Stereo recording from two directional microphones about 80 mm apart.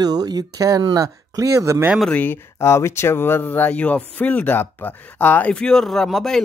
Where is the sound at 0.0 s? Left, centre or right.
Right.